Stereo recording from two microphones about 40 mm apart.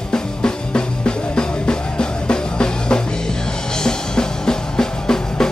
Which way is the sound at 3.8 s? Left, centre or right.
Centre.